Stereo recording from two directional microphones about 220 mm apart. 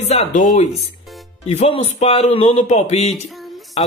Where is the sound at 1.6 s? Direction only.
30° left (ahead or behind).